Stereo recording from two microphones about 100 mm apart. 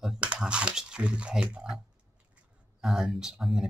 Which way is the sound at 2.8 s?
5° right (ahead or behind).